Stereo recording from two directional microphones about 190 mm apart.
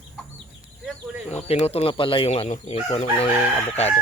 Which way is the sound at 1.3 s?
35° left (ahead or behind).